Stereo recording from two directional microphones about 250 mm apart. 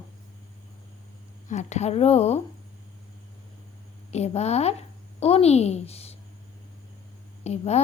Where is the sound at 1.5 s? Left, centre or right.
Left.